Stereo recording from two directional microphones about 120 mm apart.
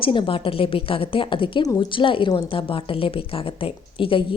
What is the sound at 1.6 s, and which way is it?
Speech, 30° left (ahead or behind).